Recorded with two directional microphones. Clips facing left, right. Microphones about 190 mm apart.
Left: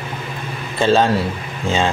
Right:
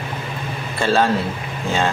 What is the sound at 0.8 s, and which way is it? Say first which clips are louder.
Speech: left 3 dB; 20° left (ahead or behind).